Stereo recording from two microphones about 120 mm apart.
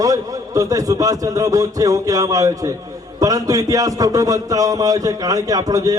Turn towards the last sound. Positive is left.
turn(degrees=-30)  # may be behind; listen again after turning